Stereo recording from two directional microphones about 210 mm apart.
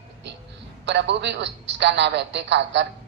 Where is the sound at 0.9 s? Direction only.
55° right (ahead or behind).